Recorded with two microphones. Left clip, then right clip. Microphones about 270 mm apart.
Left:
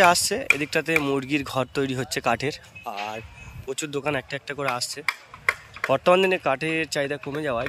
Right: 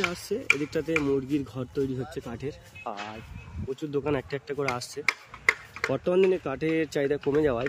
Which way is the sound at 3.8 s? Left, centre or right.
Centre.